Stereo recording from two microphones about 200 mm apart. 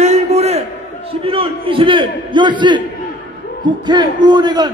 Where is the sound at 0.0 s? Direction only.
35° right (ahead or behind).